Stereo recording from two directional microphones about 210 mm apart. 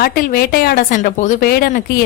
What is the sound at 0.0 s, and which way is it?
Speech, 45° left (ahead or behind).